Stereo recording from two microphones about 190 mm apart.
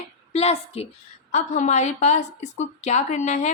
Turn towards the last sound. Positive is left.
turn(degrees=40)  # may be behind; listen again after turning